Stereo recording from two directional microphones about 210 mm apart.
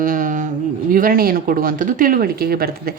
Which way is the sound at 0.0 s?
40° right (ahead or behind).